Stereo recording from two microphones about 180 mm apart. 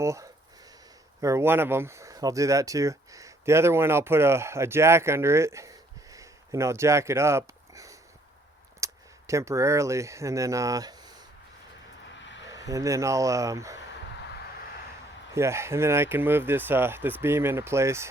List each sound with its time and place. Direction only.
0.0 s a sound: 15° right (ahead or behind)
1.2 s speech: 15° right (ahead or behind)
12.2 s vehicle: 90° left
12.5 s speech: 20° right (ahead or behind)
15.4 s speech: 15° right (ahead or behind)